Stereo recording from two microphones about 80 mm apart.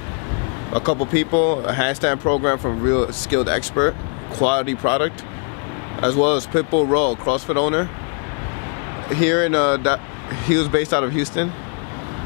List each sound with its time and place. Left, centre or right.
0.7 s speech: left
9.1 s speech: left